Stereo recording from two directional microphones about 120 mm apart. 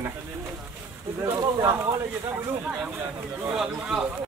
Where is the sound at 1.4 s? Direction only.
30° right (ahead or behind).